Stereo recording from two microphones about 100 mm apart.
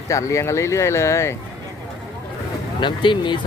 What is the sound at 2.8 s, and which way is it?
Speech, 55° left (ahead or behind).